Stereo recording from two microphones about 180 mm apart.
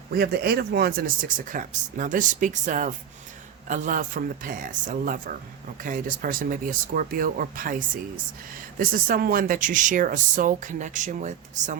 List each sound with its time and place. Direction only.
0.1 s speech: 60° right (ahead or behind); by 11.8 s 40° right (ahead or behind)